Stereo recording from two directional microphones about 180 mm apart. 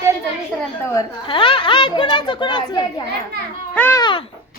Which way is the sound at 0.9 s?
25° left (ahead or behind).